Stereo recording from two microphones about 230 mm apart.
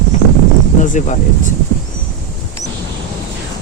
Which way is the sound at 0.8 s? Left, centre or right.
Left.